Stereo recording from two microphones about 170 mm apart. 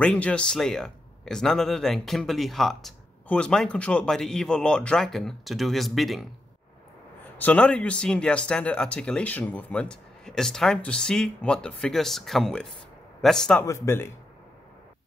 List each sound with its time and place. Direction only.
0.0 s a man's voice: 5° left (ahead or behind)
7.3 s a man's voice: 10° left (ahead or behind)
13.7 s speech: 15° left (ahead or behind)